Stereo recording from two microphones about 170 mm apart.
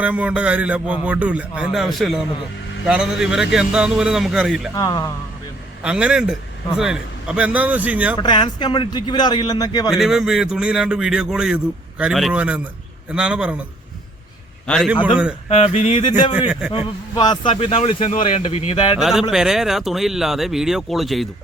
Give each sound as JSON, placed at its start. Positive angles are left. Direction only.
{"t": 0.0, "sound": "a man's voice", "side_deg": -10}
{"t": 4.7, "sound": "speech", "side_deg": 20}
{"t": 5.8, "sound": "a man's voice", "side_deg": -5}
{"t": 8.1, "sound": "speech", "side_deg": 25}
{"t": 9.9, "sound": "a man's voice", "side_deg": 0}
{"t": 15.4, "sound": "speech", "side_deg": 35}
{"t": 16.5, "sound": "a man's voice", "side_deg": -5}
{"t": 17.2, "sound": "speech", "side_deg": 30}
{"t": 18.9, "sound": "a man's voice", "side_deg": 0}